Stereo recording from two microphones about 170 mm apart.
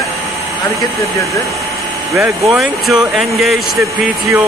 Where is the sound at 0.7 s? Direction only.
20° left (ahead or behind).